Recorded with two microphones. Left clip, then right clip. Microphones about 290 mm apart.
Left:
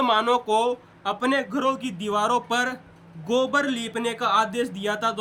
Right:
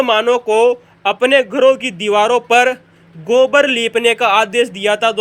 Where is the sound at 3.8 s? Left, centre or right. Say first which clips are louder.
Right 13 dB; centre.